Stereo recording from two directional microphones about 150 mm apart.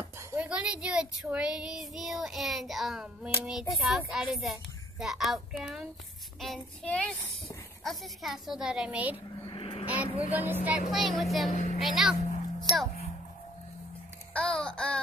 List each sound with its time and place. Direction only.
0.3 s speech: 10° right (ahead or behind)
1.3 s child singing: 5° right (ahead or behind)
9.5 s vehicle: 35° left (ahead or behind)
9.8 s vehicle: 10° right (ahead or behind)
10.4 s speech: 10° right (ahead or behind)
10.9 s child singing: centre (ahead or behind)
12.7 s a child's voice: 25° right (ahead or behind)
14.3 s babbling: 5° left (ahead or behind)